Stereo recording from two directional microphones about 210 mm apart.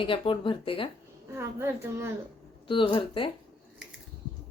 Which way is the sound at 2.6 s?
25° left (ahead or behind).